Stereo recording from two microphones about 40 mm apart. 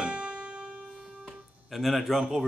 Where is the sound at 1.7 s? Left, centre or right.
Centre.